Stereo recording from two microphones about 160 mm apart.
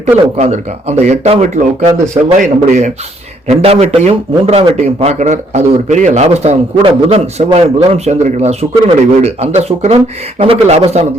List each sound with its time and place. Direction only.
0.3 s a man's voice: 40° right (ahead or behind)